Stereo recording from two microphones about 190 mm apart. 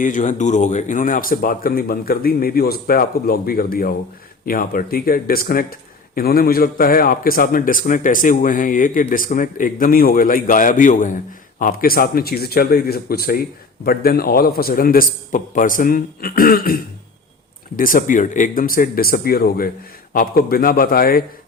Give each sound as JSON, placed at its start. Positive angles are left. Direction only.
{"t": 0.0, "sound": "a man's voice", "side_deg": 40}